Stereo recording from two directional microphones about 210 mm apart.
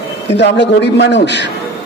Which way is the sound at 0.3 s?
55° left (ahead or behind).